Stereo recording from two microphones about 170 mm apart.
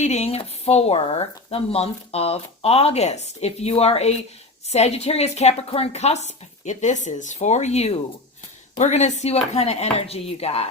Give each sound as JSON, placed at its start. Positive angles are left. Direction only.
{"t": 0.0, "sound": "speech", "side_deg": 40}